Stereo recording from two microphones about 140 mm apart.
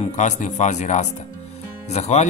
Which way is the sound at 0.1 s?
60° left (ahead or behind).